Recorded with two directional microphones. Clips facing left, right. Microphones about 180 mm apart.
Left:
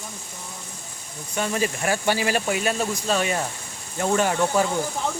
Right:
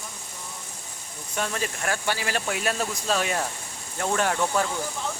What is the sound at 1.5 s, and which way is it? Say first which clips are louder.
Speech: left 9 dB; 10° left (ahead or behind).